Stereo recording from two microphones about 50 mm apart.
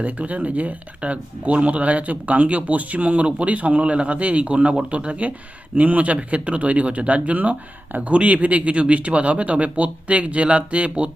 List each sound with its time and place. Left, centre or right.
0.0 s speech: right